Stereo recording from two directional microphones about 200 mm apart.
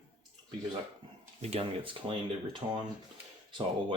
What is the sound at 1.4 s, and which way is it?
Speech, 30° right (ahead or behind).